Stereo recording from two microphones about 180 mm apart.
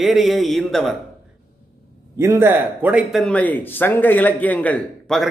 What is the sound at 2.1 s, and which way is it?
A man's voice, 15° right (ahead or behind).